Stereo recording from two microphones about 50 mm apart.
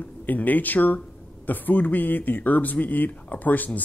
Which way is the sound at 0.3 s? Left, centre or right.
Left.